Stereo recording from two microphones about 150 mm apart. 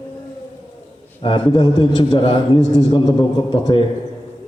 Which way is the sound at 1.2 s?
35° left (ahead or behind).